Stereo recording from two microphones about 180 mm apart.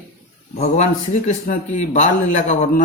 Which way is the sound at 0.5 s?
35° left (ahead or behind).